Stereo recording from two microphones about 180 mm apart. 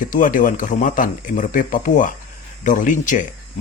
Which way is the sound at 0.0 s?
50° left (ahead or behind).